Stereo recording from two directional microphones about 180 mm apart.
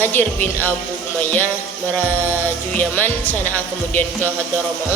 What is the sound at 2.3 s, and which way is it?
Music, 10° left (ahead or behind).